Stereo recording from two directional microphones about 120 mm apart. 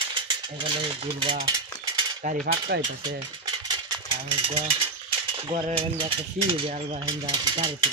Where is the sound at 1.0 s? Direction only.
45° right (ahead or behind).